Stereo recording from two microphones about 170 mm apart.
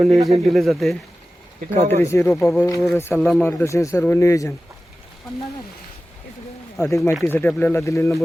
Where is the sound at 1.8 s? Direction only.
35° right (ahead or behind).